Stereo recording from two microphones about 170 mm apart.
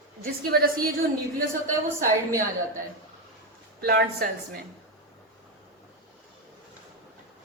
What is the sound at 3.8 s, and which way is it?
Speech, 65° right (ahead or behind).